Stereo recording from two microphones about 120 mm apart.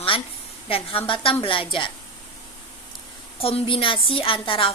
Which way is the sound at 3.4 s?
50° left (ahead or behind).